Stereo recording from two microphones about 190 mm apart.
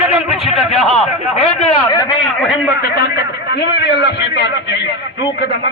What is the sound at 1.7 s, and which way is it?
Speech, 25° left (ahead or behind).